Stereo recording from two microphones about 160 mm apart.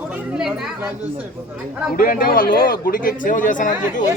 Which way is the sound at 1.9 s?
60° left (ahead or behind).